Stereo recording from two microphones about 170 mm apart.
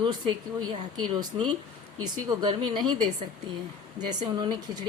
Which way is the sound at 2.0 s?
25° right (ahead or behind).